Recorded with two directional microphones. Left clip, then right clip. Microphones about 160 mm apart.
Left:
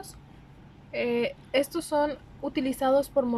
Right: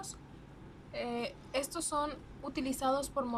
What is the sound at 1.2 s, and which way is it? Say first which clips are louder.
A woman's voice: left 10 dB; 40° left (ahead or behind).